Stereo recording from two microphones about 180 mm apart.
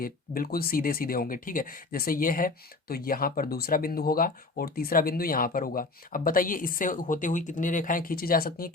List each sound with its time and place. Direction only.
0.0 s speech: 55° left (ahead or behind)